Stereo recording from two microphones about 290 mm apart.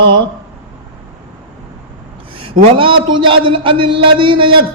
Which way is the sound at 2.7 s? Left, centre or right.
Centre.